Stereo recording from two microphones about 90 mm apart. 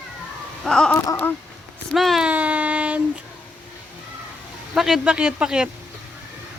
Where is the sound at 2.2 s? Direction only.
15° right (ahead or behind).